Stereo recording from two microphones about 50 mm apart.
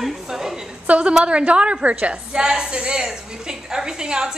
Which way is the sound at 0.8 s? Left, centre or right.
Right.